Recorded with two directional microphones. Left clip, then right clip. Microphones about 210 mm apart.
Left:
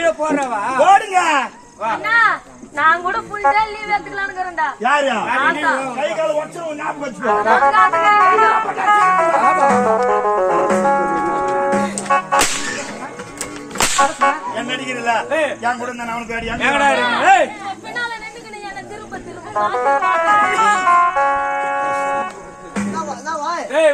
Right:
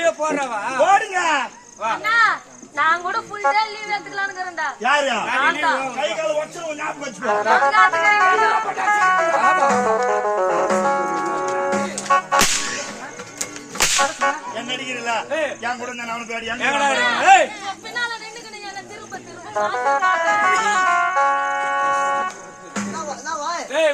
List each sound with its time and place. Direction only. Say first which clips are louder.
0.0 s a man's voice: left 3 dB; 10° left (ahead or behind)
0.8 s a sound: left 4 dB; 55° left (ahead or behind)
2.0 s speech: left 3 dB; 10° right (ahead or behind)
4.8 s a man's voice: left 2 dB; 10° left (ahead or behind); by 12.4 s 15° right (ahead or behind)
14.0 s a man's voice: left 9 dB; 5° right (ahead or behind)
14.5 s a man's voice: left 4 dB; 10° left (ahead or behind)
19.5 s music: left 3 dB; 15° right (ahead or behind)